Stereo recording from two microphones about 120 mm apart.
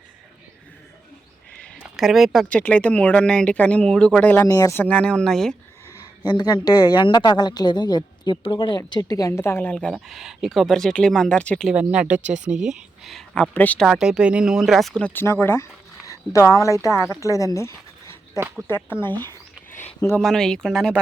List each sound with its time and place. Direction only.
1.5 s a sound: 5° left (ahead or behind)
2.0 s speech: centre (ahead or behind)
4.4 s speech: 30° left (ahead or behind)
4.8 s speech: 10° left (ahead or behind)
5.9 s speech: 35° left (ahead or behind); by 9.7 s 20° left (ahead or behind)
9.7 s speech: centre (ahead or behind)
11.7 s speech: 10° right (ahead or behind)
12.2 s speech: 80° right
13.0 s speech: centre (ahead or behind)
13.8 s speech: 5° right (ahead or behind); by 19.2 s 15° left (ahead or behind)
20.1 s speech: 5° left (ahead or behind)